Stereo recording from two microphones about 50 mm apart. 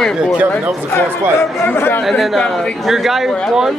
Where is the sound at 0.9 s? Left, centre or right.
Left.